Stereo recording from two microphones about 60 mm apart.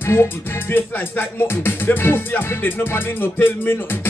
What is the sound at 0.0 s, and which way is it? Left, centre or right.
Music, left.